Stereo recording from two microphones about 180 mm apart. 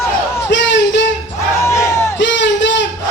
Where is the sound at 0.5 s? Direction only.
75° left (ahead or behind).